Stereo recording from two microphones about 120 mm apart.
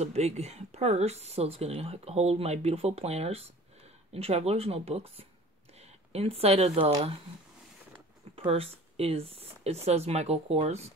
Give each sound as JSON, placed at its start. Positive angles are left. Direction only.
{"t": 0.0, "sound": "speech", "side_deg": -65}
{"t": 8.4, "sound": "speech", "side_deg": -55}